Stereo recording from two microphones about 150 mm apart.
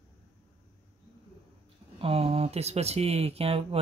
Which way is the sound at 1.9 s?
40° right (ahead or behind).